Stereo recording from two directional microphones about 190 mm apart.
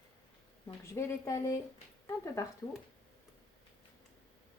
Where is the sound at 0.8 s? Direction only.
15° left (ahead or behind).